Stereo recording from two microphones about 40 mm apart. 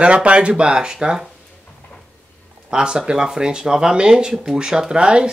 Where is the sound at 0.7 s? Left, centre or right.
Centre.